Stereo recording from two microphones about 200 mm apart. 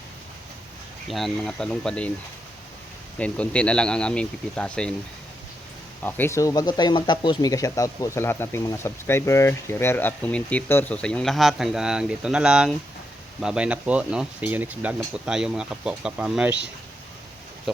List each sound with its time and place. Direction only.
1.0 s speech: centre (ahead or behind)
3.2 s speech: 5° left (ahead or behind)
6.0 s speech: 10° left (ahead or behind)